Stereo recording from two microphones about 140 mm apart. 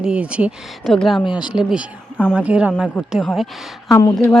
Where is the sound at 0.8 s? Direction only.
5° left (ahead or behind).